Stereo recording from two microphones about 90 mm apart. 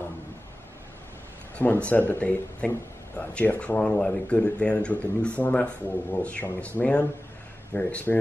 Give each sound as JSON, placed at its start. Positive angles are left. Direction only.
{"t": 1.6, "sound": "speech", "side_deg": 15}